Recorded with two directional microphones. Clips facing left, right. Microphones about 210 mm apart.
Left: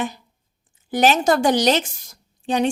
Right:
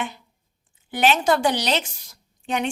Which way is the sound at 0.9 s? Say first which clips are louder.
Left 3 dB; 40° left (ahead or behind).